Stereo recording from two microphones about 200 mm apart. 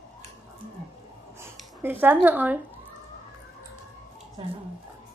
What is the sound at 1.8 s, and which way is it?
Speech, 10° right (ahead or behind).